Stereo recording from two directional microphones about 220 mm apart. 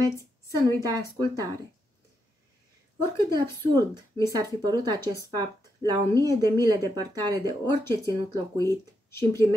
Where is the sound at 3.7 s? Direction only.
15° right (ahead or behind).